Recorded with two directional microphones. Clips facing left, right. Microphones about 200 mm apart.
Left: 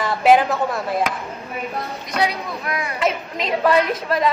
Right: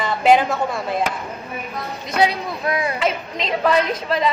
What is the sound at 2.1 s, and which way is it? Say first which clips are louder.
Speech: right 3 dB; 25° right (ahead or behind).